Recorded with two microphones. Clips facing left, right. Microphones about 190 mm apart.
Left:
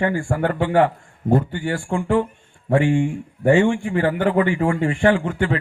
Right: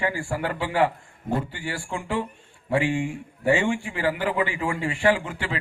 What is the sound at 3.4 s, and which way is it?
A man's voice, 45° left (ahead or behind).